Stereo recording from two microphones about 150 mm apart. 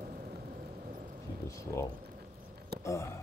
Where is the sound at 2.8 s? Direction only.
20° left (ahead or behind).